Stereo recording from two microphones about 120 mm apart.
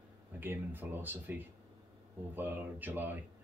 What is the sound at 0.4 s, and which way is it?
Speech, 15° right (ahead or behind).